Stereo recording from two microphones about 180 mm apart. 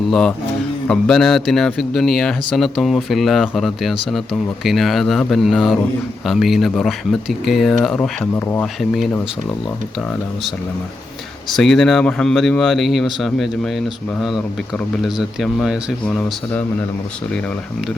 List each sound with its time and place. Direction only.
0.1 s speech: 5° left (ahead or behind)
8.6 s speech: centre (ahead or behind)
11.5 s speech: centre (ahead or behind)